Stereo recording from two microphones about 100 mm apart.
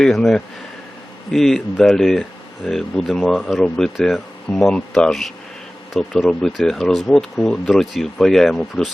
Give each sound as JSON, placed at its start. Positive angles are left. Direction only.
{"t": 0.0, "sound": "speech", "side_deg": 5}